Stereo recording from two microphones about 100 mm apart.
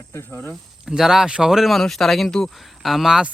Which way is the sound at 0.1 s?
20° left (ahead or behind).